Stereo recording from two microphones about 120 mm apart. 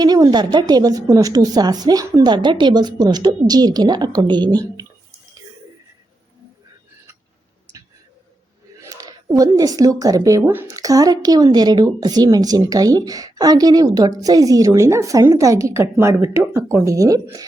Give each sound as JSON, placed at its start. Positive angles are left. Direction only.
{"t": 0.0, "sound": "speech", "side_deg": -35}
{"t": 8.9, "sound": "speech", "side_deg": -30}